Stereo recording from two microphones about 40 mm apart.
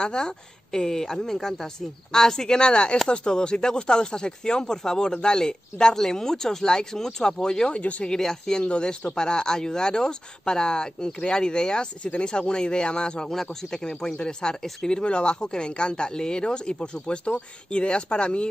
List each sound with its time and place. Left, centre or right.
0.0 s a woman's voice: centre
7.7 s speech: left
8.1 s a woman's voice: centre
8.5 s speech: left
13.3 s speech: centre; by 18.5 s left